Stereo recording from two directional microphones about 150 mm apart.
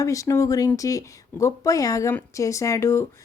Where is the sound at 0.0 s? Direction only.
20° left (ahead or behind).